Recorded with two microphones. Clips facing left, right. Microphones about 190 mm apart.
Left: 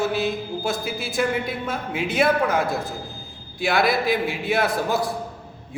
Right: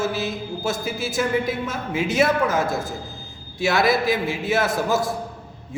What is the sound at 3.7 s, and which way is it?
A man's voice, 55° left (ahead or behind).